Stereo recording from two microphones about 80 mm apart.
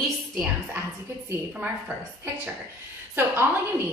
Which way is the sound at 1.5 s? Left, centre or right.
Centre.